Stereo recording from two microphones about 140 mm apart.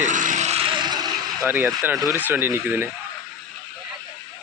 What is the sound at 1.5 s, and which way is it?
Speech, 15° right (ahead or behind).